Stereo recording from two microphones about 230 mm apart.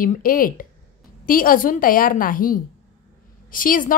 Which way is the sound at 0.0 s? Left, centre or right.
Left.